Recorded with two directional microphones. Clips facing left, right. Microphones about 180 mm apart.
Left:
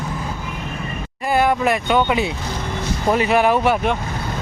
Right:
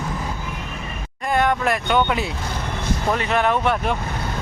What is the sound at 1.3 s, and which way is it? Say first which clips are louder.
Speech: left 3 dB; 5° left (ahead or behind).